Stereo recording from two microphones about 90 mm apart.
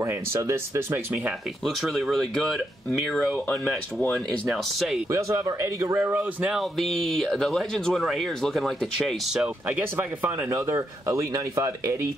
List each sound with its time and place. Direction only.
0.0 s speech: 30° right (ahead or behind)
1.8 s speech: centre (ahead or behind); by 4.1 s 20° left (ahead or behind)
4.1 s speech: centre (ahead or behind)
5.1 s speech: 40° right (ahead or behind)
6.8 s speech: centre (ahead or behind)
9.7 s speech: 20° right (ahead or behind)